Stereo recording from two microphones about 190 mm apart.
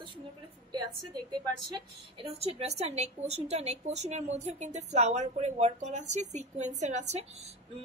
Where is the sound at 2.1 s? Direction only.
30° right (ahead or behind).